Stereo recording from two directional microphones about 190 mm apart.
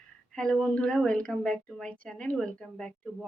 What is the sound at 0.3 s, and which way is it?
A woman's voice, centre (ahead or behind).